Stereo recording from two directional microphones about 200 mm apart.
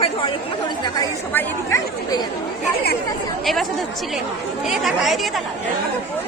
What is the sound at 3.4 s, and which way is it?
Speech, centre (ahead or behind).